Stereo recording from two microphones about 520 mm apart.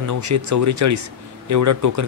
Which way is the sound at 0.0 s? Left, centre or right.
Right.